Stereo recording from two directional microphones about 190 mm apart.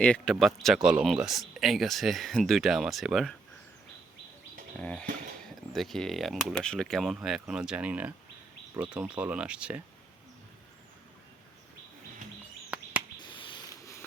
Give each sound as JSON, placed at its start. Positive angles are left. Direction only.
{"t": 0.0, "sound": "speech", "side_deg": 5}
{"t": 4.8, "sound": "speech", "side_deg": 5}
{"t": 13.1, "sound": "rodents", "side_deg": 25}